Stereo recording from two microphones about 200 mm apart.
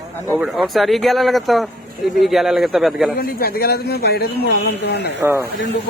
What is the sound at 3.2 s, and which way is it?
Speech, 50° left (ahead or behind).